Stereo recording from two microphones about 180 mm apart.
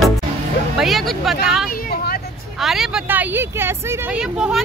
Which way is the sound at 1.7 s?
55° left (ahead or behind).